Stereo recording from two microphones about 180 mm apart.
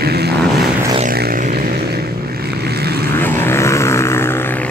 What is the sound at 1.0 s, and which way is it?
Music, 55° right (ahead or behind).